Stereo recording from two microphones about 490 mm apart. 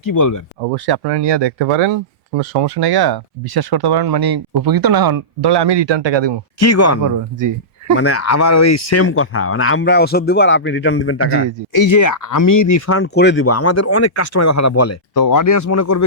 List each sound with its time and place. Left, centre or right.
0.0 s speech: left
0.6 s speech: right
6.6 s speech: left
7.0 s speech: right
7.9 s speech: left
11.7 s speech: left